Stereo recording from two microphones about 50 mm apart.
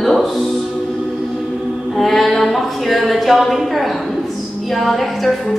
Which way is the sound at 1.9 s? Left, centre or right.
Centre.